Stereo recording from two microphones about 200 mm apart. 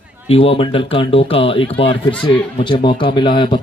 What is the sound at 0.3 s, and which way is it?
Speech, 30° left (ahead or behind).